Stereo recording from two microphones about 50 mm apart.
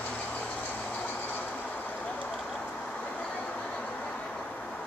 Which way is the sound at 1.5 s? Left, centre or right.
Left.